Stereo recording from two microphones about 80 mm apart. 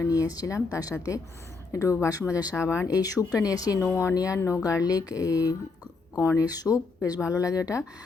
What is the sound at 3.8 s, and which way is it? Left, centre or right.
Speech, left.